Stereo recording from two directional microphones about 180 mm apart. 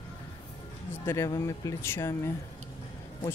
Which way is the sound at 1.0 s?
15° left (ahead or behind).